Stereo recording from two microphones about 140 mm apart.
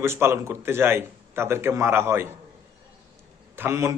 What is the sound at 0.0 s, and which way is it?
A man's voice, 20° right (ahead or behind).